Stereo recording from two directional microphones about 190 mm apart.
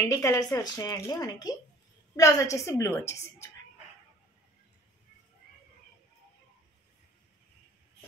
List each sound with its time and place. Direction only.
0.1 s a woman's voice: 15° left (ahead or behind)